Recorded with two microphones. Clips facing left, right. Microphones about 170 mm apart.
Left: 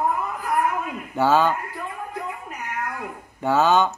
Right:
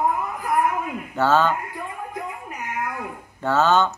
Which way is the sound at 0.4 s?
15° right (ahead or behind).